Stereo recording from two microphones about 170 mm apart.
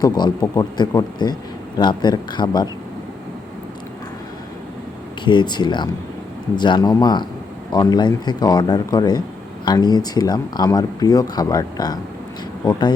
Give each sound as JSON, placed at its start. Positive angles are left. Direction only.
{"t": 0.0, "sound": "speech", "side_deg": 25}
{"t": 5.2, "sound": "speech", "side_deg": 25}